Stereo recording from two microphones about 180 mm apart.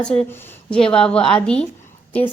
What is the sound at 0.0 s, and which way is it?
A woman's voice, 5° left (ahead or behind).